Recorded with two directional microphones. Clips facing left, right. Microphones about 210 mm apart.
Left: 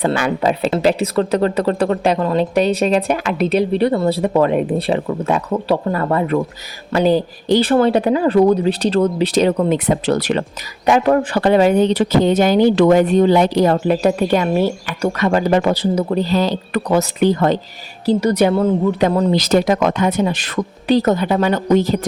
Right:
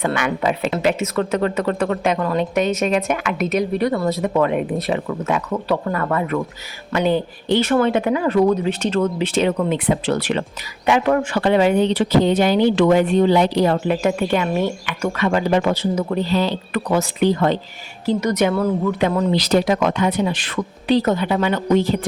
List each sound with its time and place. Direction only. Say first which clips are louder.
0.0 s speech: left 3 dB; 35° left (ahead or behind)
18.0 s speech: left 4 dB; 35° left (ahead or behind)